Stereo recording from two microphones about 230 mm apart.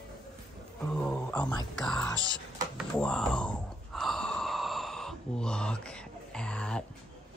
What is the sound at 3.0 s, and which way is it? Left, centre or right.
Gasp, centre.